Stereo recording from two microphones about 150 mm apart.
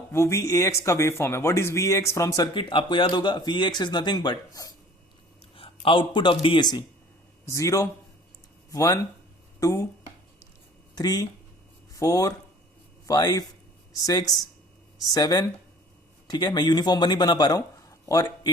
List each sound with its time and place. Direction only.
0.1 s speech: 20° left (ahead or behind)
5.5 s a man's voice: 35° left (ahead or behind); by 9.9 s 20° left (ahead or behind)
10.9 s speech: 25° left (ahead or behind)